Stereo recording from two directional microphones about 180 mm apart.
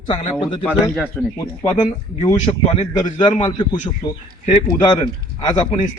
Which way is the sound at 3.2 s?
25° left (ahead or behind).